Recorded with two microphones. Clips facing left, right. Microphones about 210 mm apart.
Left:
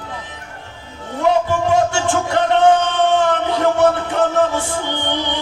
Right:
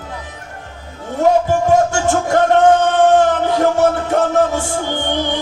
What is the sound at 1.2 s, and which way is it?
Music, 45° right (ahead or behind).